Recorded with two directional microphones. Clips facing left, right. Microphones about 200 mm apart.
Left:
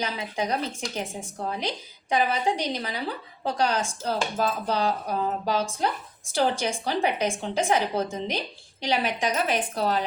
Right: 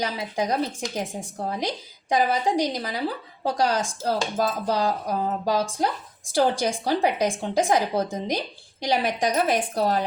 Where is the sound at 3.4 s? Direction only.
35° right (ahead or behind).